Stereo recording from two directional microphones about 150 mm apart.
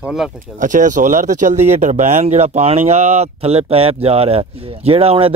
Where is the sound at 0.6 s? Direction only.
55° right (ahead or behind); by 5.3 s 40° right (ahead or behind).